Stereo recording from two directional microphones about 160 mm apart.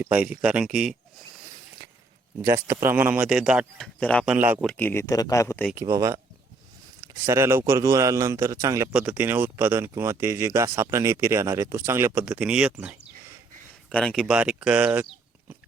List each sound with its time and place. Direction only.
0.0 s a man's voice: 10° right (ahead or behind)
2.4 s a man's voice: 15° right (ahead or behind)
4.0 s speech: 5° left (ahead or behind)
4.3 s a man's voice: 10° right (ahead or behind)
4.6 s speech: 10° left (ahead or behind)
5.7 s a man's voice: 20° right (ahead or behind)
13.9 s speech: 5° left (ahead or behind)